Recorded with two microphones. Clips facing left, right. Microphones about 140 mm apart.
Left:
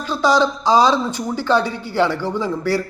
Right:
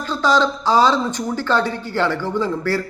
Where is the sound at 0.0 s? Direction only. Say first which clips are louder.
Left 1 dB; 15° left (ahead or behind).